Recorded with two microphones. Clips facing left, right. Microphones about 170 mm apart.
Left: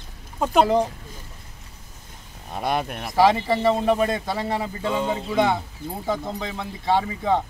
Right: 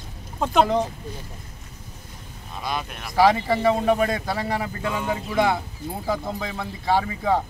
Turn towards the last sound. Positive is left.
turn(degrees=0)  # may be behind; listen again after turning